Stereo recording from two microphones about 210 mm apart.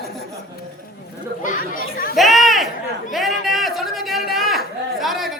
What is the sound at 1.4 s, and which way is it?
Speech, 40° left (ahead or behind).